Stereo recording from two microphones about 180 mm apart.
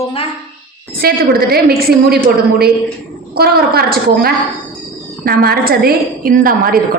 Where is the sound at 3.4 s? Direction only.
60° right (ahead or behind).